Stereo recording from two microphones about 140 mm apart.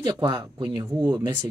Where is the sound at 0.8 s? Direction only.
15° right (ahead or behind).